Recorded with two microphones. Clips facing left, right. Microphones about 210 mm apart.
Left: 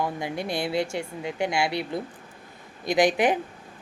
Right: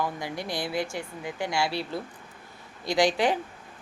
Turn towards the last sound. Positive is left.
turn(degrees=20)  # may be behind; listen again after turning